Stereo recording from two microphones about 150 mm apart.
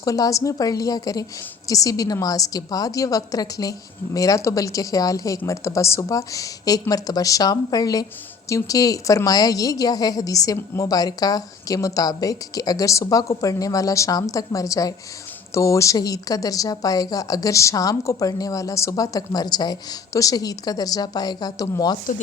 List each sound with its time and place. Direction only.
0.0 s a woman's voice: 20° left (ahead or behind)